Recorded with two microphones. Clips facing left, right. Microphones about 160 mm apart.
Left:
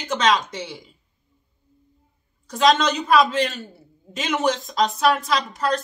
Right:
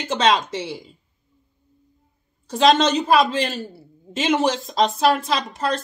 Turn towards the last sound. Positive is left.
turn(degrees=-30)  # may be behind; listen again after turning